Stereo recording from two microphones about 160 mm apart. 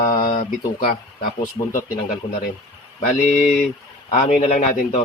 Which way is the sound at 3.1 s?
50° left (ahead or behind).